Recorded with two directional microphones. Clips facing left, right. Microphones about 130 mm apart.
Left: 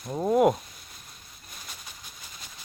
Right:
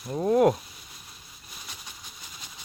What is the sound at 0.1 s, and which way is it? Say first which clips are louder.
Speech: right 1 dB; 10° left (ahead or behind).